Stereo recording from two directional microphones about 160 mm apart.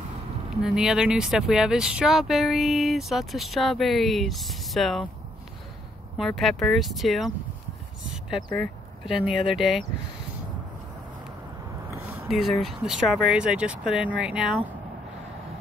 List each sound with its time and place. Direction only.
0.6 s speech: 5° right (ahead or behind)
6.1 s speech: centre (ahead or behind)
8.1 s a sound: centre (ahead or behind)
8.5 s speech: centre (ahead or behind)
12.3 s speech: centre (ahead or behind)